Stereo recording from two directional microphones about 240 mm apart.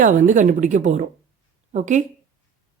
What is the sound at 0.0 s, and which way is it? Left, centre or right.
A woman's voice, right.